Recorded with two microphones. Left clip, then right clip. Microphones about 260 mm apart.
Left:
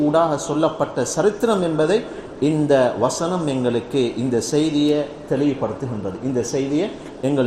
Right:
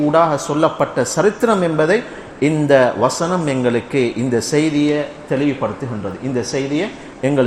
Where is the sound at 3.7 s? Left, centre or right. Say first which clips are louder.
Right 3 dB; right.